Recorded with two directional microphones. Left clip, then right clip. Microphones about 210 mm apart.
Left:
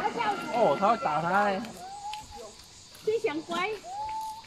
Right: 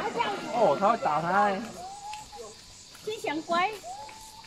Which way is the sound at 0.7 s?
20° left (ahead or behind).